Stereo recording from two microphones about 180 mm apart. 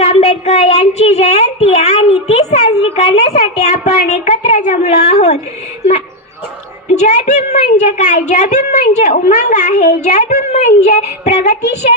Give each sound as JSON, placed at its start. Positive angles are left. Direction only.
{"t": 0.0, "sound": "a child's voice", "side_deg": 35}
{"t": 6.9, "sound": "a child's voice", "side_deg": 40}